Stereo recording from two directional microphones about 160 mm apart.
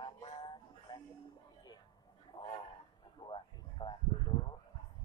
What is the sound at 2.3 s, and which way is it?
Speech, 30° left (ahead or behind).